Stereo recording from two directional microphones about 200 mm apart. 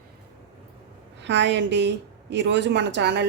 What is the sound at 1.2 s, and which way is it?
A woman's voice, 60° right (ahead or behind).